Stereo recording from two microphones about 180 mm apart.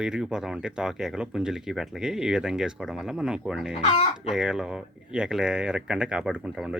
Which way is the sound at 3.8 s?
35° left (ahead or behind).